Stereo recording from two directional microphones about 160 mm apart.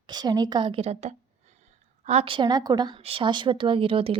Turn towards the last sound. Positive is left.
turn(degrees=-35)  # may be behind; listen again after turning